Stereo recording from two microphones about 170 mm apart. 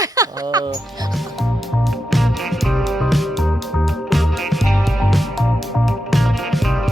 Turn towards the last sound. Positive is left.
turn(degrees=0)  # may be behind; listen again after turning